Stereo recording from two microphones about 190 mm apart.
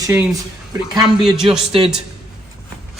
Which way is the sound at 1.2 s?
5° right (ahead or behind).